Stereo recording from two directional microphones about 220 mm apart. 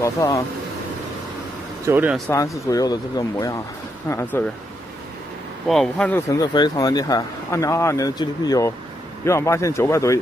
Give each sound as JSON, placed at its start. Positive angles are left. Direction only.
{"t": 0.0, "sound": "speech", "side_deg": 15}
{"t": 1.9, "sound": "speech", "side_deg": -5}
{"t": 2.3, "sound": "speech", "side_deg": 15}
{"t": 5.7, "sound": "speech", "side_deg": 5}